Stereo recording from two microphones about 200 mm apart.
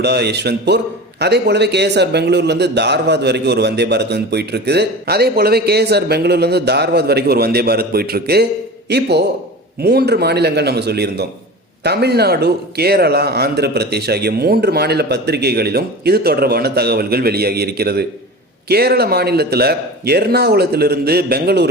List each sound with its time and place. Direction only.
0.0 s a man's voice: 55° right (ahead or behind)